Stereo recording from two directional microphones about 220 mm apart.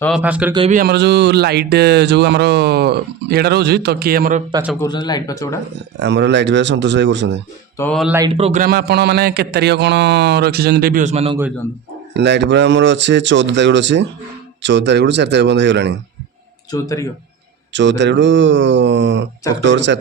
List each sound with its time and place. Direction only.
0.0 s a man's voice: centre (ahead or behind)
0.7 s speech: 45° right (ahead or behind)
4.8 s speech: 20° left (ahead or behind)
6.0 s speech: 50° right (ahead or behind)
7.8 s a man's voice: 5° left (ahead or behind)
8.3 s speech: 30° right (ahead or behind)
8.6 s speech: 45° right (ahead or behind); by 11.3 s 30° right (ahead or behind)
12.1 s speech: 50° right (ahead or behind)
16.7 s speech: 15° left (ahead or behind)
17.7 s speech: 55° right (ahead or behind)